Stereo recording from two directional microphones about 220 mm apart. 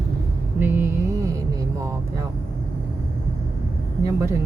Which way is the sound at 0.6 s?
10° right (ahead or behind).